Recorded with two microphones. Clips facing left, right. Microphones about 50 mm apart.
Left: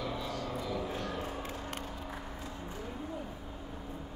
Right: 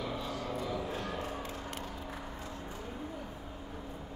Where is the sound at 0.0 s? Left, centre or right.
Centre.